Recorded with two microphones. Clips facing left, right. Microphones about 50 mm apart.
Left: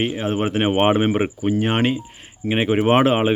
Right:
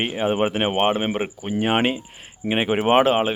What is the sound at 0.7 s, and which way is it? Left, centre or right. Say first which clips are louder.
Speech: left 4 dB; centre.